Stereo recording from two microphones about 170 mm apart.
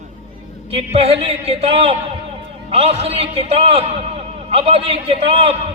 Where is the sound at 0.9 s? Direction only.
35° right (ahead or behind).